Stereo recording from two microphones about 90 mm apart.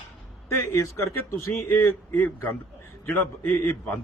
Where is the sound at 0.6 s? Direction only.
30° left (ahead or behind).